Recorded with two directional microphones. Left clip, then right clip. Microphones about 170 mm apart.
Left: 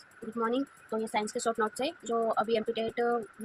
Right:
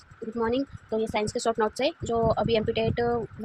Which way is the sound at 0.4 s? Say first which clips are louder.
Right 3 dB; 35° right (ahead or behind).